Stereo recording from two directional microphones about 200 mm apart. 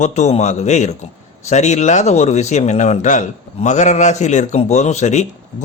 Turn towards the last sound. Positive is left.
turn(degrees=35)  # may be behind; listen again after turning